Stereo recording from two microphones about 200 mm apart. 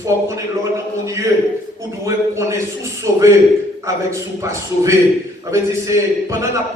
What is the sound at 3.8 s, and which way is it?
A man's voice, 15° right (ahead or behind).